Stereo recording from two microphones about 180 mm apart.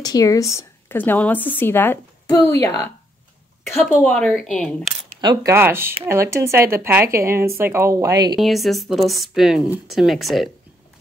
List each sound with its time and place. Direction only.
0.0 s a woman's voice: 20° left (ahead or behind)
3.8 s speech: 5° left (ahead or behind)
5.2 s speech: 25° right (ahead or behind)
5.5 s speech: 15° right (ahead or behind)
8.4 s speech: centre (ahead or behind)